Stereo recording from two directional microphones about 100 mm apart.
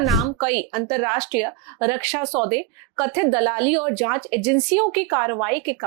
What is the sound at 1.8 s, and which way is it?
A woman's voice, 20° right (ahead or behind).